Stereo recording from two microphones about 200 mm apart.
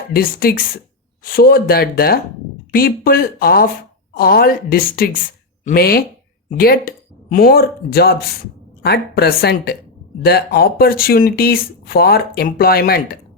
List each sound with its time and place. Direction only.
0.1 s speech: 50° left (ahead or behind)